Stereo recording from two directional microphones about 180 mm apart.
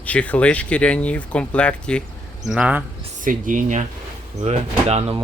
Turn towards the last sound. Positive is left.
turn(degrees=-35)  # may be behind; listen again after turning